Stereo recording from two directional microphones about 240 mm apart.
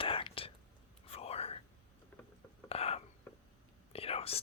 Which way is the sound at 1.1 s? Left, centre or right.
Left.